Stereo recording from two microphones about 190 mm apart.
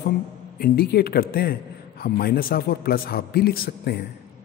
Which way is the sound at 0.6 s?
55° left (ahead or behind).